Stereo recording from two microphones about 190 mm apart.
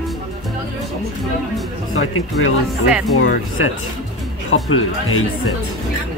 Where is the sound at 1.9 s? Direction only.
90° left.